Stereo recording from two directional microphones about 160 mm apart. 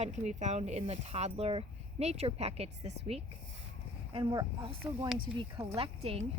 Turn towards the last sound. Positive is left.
turn(degrees=-40)  # may be behind; listen again after turning